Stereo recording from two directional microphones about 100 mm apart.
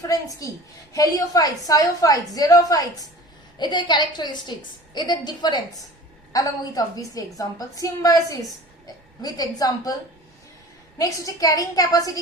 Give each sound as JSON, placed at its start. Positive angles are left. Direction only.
{"t": 0.0, "sound": "a woman's voice", "side_deg": 35}
{"t": 3.6, "sound": "a woman's voice", "side_deg": 50}
{"t": 10.9, "sound": "a woman's voice", "side_deg": 35}